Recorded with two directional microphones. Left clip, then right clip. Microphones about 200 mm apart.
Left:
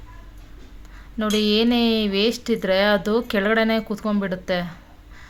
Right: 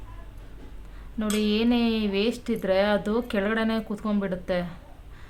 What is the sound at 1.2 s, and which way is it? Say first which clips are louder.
Speech: left 6 dB; 15° left (ahead or behind).